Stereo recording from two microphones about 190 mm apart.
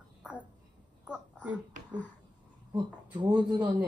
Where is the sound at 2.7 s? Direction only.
25° right (ahead or behind).